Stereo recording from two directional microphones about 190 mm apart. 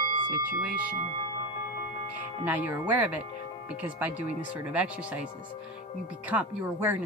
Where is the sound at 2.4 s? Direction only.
10° right (ahead or behind).